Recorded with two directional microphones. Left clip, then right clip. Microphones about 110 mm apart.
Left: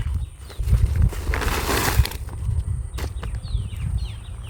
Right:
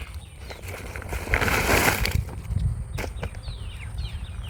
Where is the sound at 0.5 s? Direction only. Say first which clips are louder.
Left 1 dB; 20° right (ahead or behind).